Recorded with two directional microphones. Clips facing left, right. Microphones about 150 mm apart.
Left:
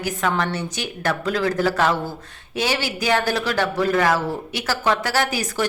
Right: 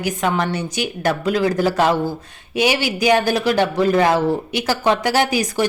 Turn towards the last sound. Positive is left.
turn(degrees=-15)  # may be behind; listen again after turning